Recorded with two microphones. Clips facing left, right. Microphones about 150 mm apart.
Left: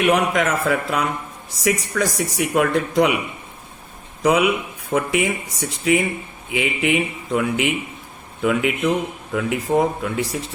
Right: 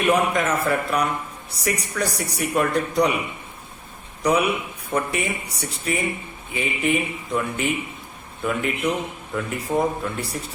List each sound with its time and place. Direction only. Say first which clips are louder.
0.0 s speech: left 2 dB; 85° left
4.2 s speech: left 3 dB; 90° left